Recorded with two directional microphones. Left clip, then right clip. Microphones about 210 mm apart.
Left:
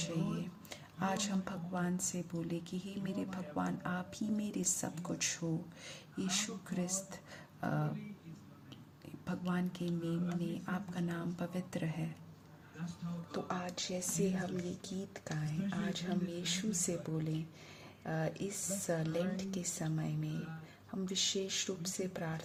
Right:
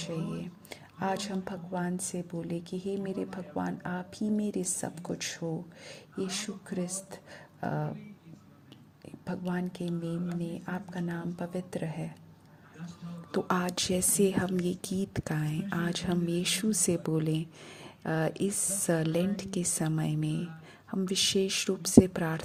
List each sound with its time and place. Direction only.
0.0 s a woman's voice: 25° right (ahead or behind)
9.2 s a woman's voice: 25° right (ahead or behind)
12.8 s speech: centre (ahead or behind)
13.3 s speech: 35° right (ahead or behind)
15.4 s speech: centre (ahead or behind)
15.8 s speech: 30° right (ahead or behind)